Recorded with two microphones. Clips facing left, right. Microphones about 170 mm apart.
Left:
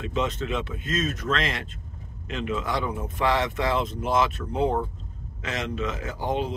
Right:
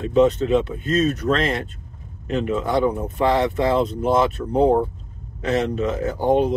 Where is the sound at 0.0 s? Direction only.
35° right (ahead or behind).